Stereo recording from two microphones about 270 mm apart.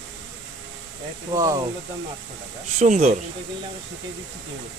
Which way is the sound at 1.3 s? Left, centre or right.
Centre.